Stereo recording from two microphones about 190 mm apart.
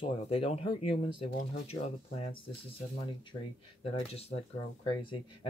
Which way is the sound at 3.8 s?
30° left (ahead or behind).